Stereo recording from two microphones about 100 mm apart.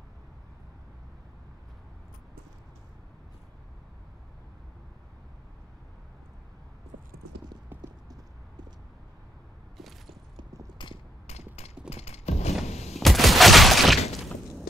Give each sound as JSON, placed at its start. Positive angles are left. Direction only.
{"t": 7.7, "sound": "clip-clop", "side_deg": -20}
{"t": 9.8, "sound": "a sound", "side_deg": 0}
{"t": 10.8, "sound": "a sound", "side_deg": 50}
{"t": 11.2, "sound": "mechanisms", "side_deg": 90}
{"t": 12.6, "sound": "gunshot", "side_deg": 90}
{"t": 12.9, "sound": "fusillade", "side_deg": 0}